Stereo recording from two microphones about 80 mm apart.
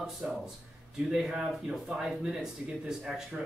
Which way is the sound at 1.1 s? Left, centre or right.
Centre.